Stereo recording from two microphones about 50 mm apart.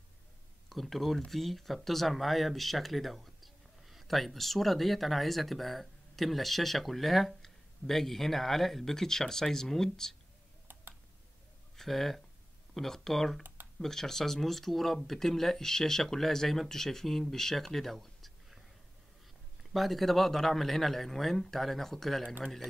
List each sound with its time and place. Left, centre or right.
0.7 s speech: centre
11.7 s speech: centre
19.7 s speech: centre